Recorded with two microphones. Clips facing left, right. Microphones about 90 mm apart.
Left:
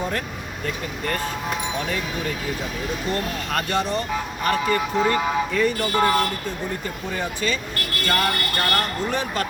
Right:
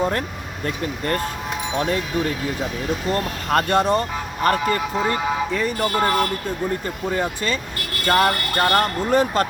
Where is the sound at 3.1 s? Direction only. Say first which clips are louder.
Right 5 dB; 45° right (ahead or behind).